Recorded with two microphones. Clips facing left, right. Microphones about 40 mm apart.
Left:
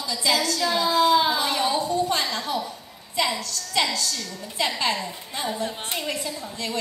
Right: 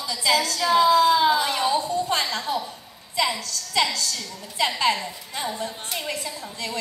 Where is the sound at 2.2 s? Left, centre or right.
Right.